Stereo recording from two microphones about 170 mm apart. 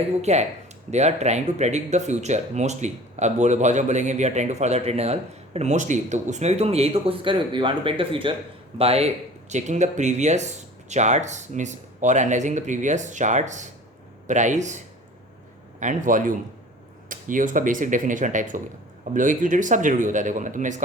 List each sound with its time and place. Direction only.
0.2 s speech: 40° right (ahead or behind)
15.8 s speech: 50° right (ahead or behind)